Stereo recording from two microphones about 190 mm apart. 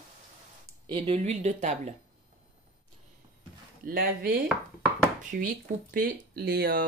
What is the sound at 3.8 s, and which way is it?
Speech, 50° right (ahead or behind).